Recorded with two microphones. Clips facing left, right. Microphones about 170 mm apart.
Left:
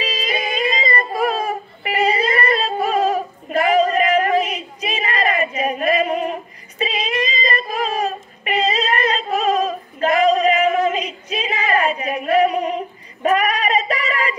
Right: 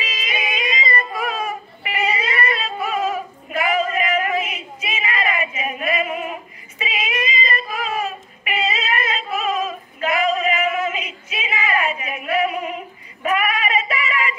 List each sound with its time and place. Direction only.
0.0 s yodeling: 35° left (ahead or behind)
6.8 s child singing: 35° left (ahead or behind)